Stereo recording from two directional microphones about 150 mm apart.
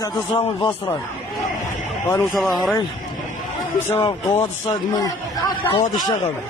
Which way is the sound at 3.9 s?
40° left (ahead or behind).